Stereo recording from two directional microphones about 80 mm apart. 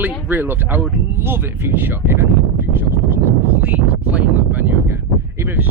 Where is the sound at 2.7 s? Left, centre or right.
Right.